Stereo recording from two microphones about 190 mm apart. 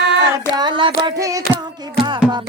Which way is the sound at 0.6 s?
25° right (ahead or behind).